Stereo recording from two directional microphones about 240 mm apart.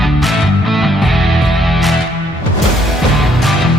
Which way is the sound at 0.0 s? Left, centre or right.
Centre.